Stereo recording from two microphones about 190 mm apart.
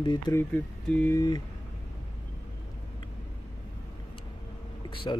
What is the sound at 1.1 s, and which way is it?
Speech, 20° left (ahead or behind).